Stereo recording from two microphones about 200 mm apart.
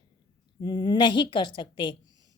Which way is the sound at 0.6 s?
25° left (ahead or behind).